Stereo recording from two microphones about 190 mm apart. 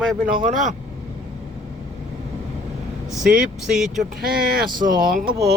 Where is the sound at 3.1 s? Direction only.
Centre (ahead or behind).